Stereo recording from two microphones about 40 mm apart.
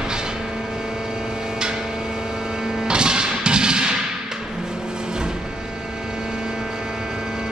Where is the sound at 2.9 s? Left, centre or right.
Right.